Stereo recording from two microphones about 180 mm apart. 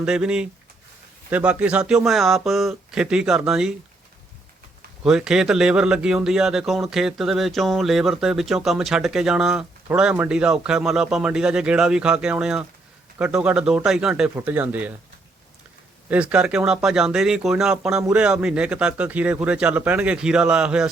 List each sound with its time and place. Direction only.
0.0 s speech: 5° right (ahead or behind)
5.0 s speech: centre (ahead or behind)
16.0 s speech: 5° right (ahead or behind)